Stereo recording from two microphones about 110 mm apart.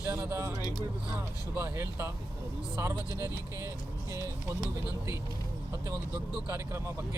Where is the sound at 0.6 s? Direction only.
40° left (ahead or behind).